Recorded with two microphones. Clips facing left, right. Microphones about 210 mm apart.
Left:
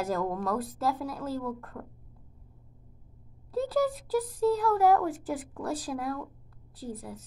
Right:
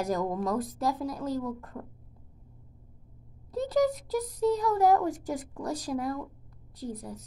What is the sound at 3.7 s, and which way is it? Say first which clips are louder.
A woman's voice: right 2 dB; 15° right (ahead or behind).